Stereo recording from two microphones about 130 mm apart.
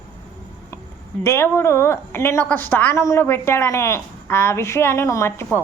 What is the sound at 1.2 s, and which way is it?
A woman's voice, 20° left (ahead or behind).